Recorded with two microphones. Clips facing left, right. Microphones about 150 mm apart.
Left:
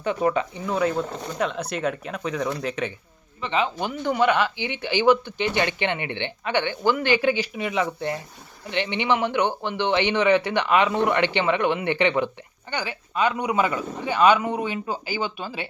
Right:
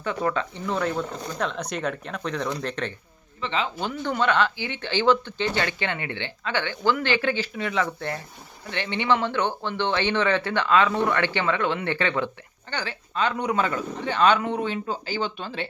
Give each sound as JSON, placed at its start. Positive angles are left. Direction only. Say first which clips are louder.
{"t": 0.0, "sound": "speech", "louder": "left 3 dB", "side_deg": 20}
{"t": 0.7, "sound": "speech", "louder": "left 3 dB", "side_deg": 5}